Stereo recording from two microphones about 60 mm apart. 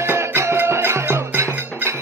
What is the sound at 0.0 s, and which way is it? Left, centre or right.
Music, right.